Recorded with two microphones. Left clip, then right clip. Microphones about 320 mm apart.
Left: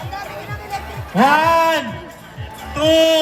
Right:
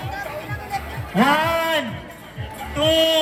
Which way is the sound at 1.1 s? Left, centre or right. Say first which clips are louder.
Left 5 dB; centre.